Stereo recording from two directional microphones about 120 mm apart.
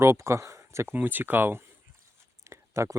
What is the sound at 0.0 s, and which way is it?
Speech, 25° right (ahead or behind).